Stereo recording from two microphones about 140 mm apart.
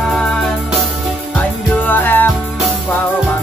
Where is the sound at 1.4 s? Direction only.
15° left (ahead or behind).